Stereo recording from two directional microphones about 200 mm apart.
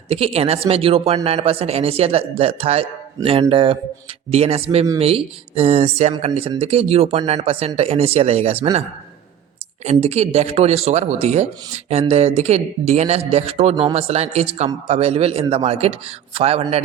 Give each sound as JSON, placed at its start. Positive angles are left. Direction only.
{"t": 0.1, "sound": "speech", "side_deg": -30}
{"t": 9.8, "sound": "speech", "side_deg": -35}